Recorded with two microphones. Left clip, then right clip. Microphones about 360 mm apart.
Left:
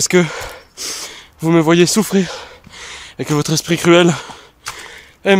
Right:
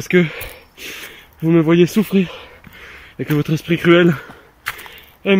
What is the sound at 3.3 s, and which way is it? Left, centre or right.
Speech, centre.